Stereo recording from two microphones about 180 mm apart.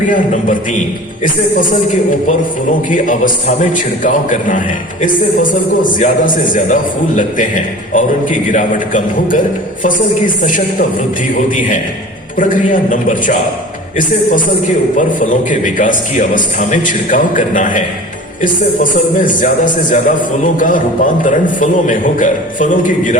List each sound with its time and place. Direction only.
0.1 s a man's voice: 45° left (ahead or behind)
2.9 s a man's voice: 45° left (ahead or behind)
12.9 s a man's voice: 45° left (ahead or behind)
14.9 s a man's voice: 45° left (ahead or behind)